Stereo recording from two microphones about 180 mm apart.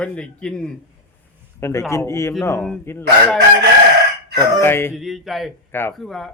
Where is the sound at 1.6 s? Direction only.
15° left (ahead or behind).